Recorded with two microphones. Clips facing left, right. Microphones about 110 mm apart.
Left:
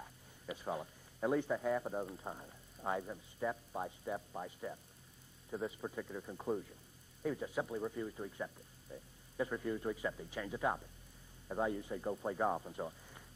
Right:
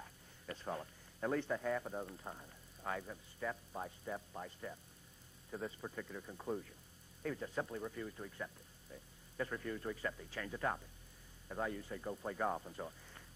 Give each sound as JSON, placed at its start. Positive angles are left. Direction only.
{"t": 0.0, "sound": "speech", "side_deg": 10}